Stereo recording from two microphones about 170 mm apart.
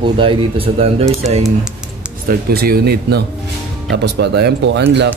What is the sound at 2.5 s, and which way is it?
Speech, 65° right (ahead or behind).